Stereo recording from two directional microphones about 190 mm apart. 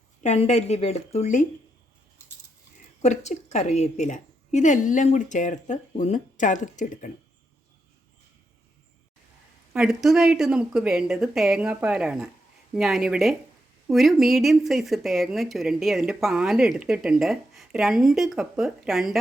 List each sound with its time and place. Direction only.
0.2 s a woman's voice: 35° left (ahead or behind)
3.0 s a woman's voice: 35° left (ahead or behind)
9.7 s speech: centre (ahead or behind)